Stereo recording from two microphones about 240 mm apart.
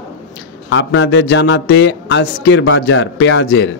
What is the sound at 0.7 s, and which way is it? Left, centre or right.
A man's voice, left.